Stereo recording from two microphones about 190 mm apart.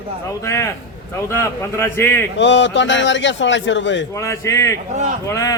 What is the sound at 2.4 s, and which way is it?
A man's voice, 70° left (ahead or behind).